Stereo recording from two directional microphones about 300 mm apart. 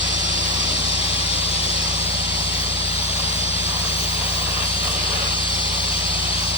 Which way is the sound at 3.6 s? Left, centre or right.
Centre.